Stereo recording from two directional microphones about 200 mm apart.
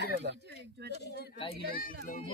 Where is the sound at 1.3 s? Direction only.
30° left (ahead or behind).